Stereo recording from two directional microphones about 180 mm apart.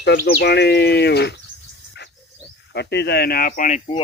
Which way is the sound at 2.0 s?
70° left (ahead or behind).